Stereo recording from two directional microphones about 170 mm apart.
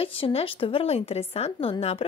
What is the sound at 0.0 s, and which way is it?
Speech, 35° left (ahead or behind).